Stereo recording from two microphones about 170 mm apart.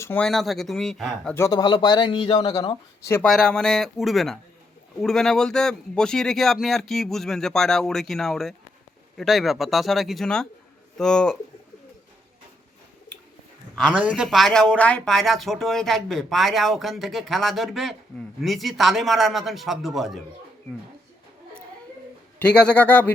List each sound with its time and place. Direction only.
0.0 s speech: 10° left (ahead or behind)
1.4 s speech: 20° left (ahead or behind)
3.2 s speech: 5° left (ahead or behind)
13.7 s speech: 5° right (ahead or behind)
22.4 s a man's voice: 5° left (ahead or behind)